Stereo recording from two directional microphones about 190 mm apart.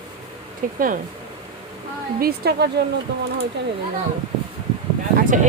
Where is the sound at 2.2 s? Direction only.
55° right (ahead or behind).